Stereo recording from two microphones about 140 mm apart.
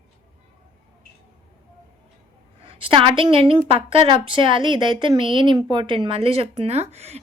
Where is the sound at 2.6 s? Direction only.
40° right (ahead or behind).